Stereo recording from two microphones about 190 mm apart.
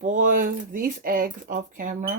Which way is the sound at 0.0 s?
40° right (ahead or behind).